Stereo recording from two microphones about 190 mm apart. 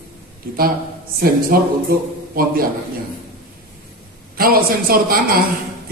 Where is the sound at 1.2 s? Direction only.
50° right (ahead or behind).